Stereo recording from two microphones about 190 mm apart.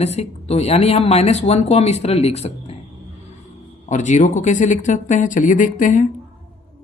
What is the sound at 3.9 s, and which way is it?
Speech, 40° left (ahead or behind).